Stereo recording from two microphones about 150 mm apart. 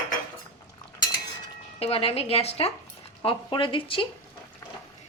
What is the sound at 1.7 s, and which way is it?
A woman's voice, 40° left (ahead or behind).